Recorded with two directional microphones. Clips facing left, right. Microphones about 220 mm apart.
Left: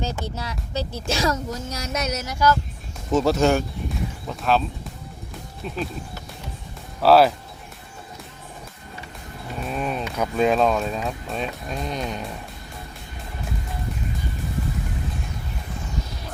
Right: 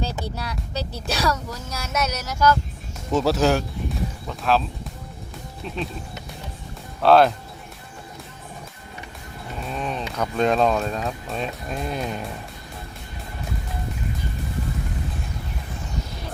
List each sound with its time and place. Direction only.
0.0 s speech: 20° left (ahead or behind)
3.1 s speech: centre (ahead or behind)
5.6 s speech: 5° left (ahead or behind)
7.0 s speech: 5° left (ahead or behind)
9.6 s speech: 5° left (ahead or behind)